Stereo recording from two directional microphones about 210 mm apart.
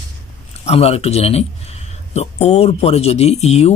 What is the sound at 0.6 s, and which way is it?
A man's voice, 30° left (ahead or behind).